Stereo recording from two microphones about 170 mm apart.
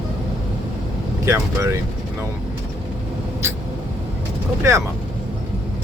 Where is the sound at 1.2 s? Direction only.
15° right (ahead or behind).